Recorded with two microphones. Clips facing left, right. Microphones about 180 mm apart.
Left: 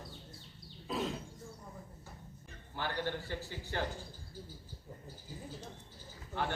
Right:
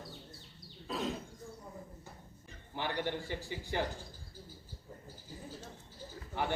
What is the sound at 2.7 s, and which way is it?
A man's voice, 15° right (ahead or behind).